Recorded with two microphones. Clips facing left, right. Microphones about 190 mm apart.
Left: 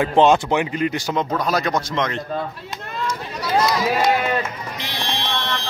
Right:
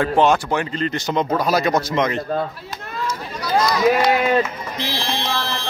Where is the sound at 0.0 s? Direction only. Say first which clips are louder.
Left 1 dB; 20° left (ahead or behind).